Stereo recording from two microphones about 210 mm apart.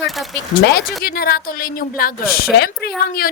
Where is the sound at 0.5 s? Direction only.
50° left (ahead or behind).